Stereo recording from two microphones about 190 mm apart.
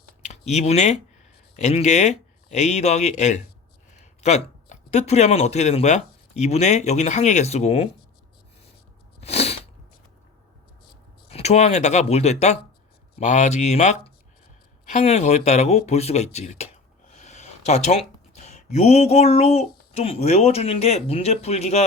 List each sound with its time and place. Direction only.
0.3 s speech: 35° left (ahead or behind)
9.2 s sneeze: 35° left (ahead or behind)
11.3 s speech: 35° left (ahead or behind)
17.1 s a sound: 35° left (ahead or behind)
18.4 s speech: 35° left (ahead or behind)